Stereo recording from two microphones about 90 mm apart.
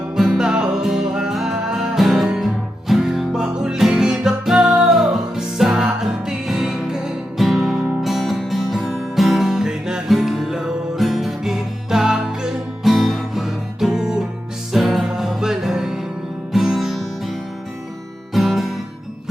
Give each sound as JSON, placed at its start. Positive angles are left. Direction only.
{"t": 0.2, "sound": "music", "side_deg": -5}
{"t": 18.3, "sound": "music", "side_deg": -5}